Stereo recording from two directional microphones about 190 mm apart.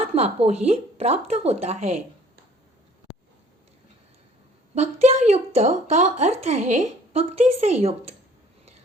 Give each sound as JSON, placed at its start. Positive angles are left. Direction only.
{"t": 0.0, "sound": "a woman's voice", "side_deg": -30}
{"t": 4.7, "sound": "a woman's voice", "side_deg": -35}